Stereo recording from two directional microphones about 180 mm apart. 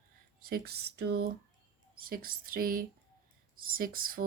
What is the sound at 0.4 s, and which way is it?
A woman's voice, 60° right (ahead or behind).